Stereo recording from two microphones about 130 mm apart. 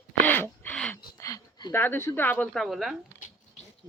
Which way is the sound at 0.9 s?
25° left (ahead or behind).